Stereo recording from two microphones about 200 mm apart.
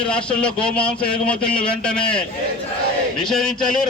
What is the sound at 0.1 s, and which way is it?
Speech, 5° left (ahead or behind).